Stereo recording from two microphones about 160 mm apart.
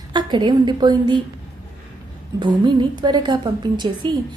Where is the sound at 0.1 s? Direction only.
30° right (ahead or behind).